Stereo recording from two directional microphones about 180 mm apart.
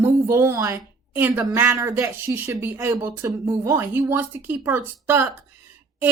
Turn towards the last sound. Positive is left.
turn(degrees=-15)  # may be behind; listen again after turning